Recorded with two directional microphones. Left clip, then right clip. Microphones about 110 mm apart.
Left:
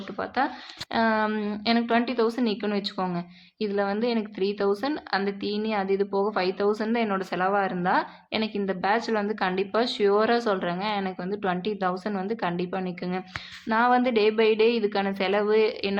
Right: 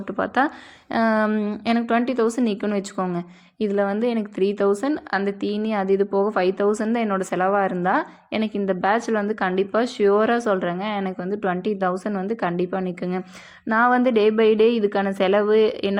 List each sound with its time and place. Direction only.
0.2 s speech: 40° right (ahead or behind)
1.2 s a woman's voice: 20° right (ahead or behind)
2.9 s speech: 10° right (ahead or behind)
3.2 s a woman's voice: 30° right (ahead or behind)
8.8 s a woman's voice: 35° right (ahead or behind)
11.6 s a woman's voice: 35° right (ahead or behind)